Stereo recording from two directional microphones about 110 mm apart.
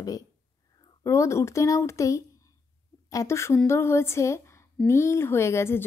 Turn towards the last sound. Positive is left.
turn(degrees=25)  # may be behind; listen again after turning